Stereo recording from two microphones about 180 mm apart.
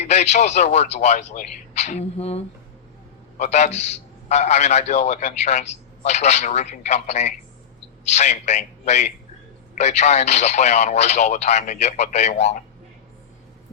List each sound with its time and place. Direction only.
0.0 s a man's voice: 40° left (ahead or behind)